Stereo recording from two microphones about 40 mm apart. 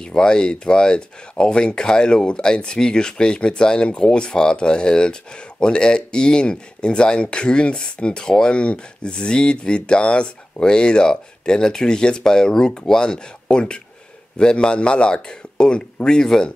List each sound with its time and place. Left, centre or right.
0.0 s speech: centre